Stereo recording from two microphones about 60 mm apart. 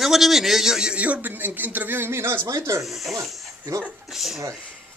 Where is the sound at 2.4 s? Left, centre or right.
Right.